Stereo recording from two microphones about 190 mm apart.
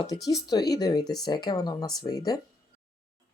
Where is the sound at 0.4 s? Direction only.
20° left (ahead or behind).